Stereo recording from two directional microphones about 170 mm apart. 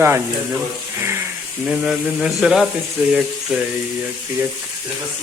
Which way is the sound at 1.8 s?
Centre (ahead or behind).